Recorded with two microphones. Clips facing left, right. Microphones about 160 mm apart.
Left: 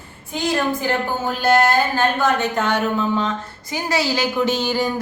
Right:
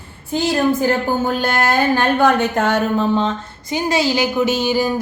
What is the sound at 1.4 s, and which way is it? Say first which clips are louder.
Speech: left 1 dB; 60° right (ahead or behind).